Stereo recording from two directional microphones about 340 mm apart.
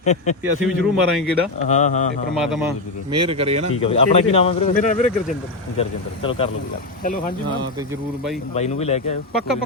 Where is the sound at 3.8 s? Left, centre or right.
Centre.